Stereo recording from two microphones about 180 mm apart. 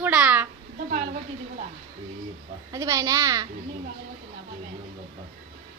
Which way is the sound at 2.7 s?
20° right (ahead or behind).